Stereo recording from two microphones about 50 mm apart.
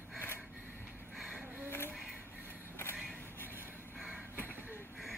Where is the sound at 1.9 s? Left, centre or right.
Centre.